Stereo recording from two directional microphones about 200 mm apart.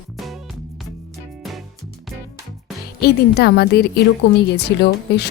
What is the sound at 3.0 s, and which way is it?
A woman's voice, 55° left (ahead or behind).